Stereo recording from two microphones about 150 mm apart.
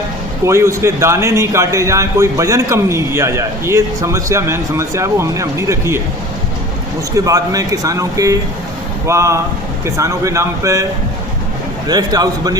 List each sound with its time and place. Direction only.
0.4 s a man's voice: 20° right (ahead or behind)
7.3 s a man's voice: 25° right (ahead or behind)
11.9 s a man's voice: 25° right (ahead or behind)